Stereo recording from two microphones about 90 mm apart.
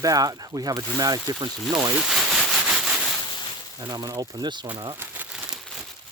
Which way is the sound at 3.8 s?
45° right (ahead or behind).